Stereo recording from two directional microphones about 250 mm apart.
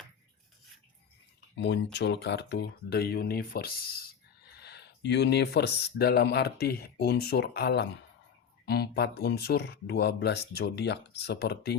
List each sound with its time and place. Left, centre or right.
1.5 s speech: left